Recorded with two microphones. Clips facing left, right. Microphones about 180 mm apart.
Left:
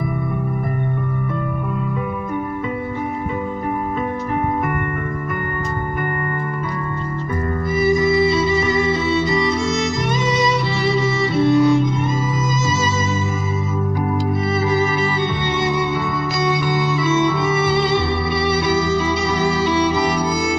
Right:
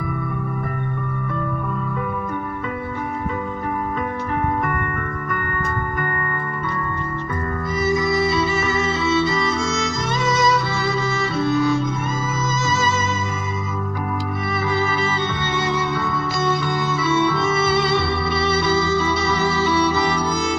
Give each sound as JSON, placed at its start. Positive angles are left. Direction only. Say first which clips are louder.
{"t": 7.8, "sound": "music", "louder": "left 4 dB", "side_deg": 20}
{"t": 16.4, "sound": "music", "louder": "left 3 dB", "side_deg": 15}